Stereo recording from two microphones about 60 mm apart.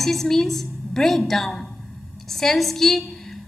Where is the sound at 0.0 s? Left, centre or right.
Centre.